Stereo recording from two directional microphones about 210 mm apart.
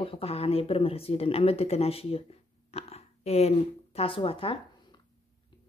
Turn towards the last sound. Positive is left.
turn(degrees=25)  # may be behind; listen again after turning